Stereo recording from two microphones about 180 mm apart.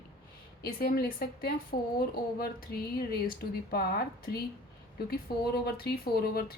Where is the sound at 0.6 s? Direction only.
60° left (ahead or behind).